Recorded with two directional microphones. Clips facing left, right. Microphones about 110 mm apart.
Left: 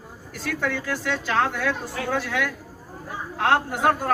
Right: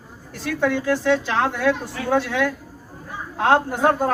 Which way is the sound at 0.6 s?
20° right (ahead or behind).